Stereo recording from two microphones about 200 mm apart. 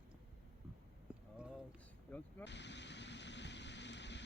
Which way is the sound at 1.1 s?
5° right (ahead or behind).